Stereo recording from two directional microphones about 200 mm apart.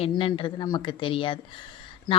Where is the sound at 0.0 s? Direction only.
25° left (ahead or behind).